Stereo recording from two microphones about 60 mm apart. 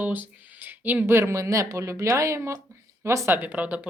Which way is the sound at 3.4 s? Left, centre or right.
Right.